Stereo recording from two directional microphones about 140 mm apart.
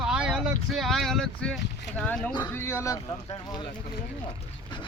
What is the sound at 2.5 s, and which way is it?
Speech, 20° left (ahead or behind).